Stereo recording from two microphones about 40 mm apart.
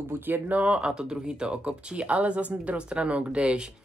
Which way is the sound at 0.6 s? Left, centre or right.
Right.